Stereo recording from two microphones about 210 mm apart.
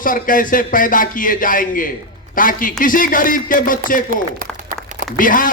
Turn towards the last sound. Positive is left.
turn(degrees=40)  # may be behind; listen again after turning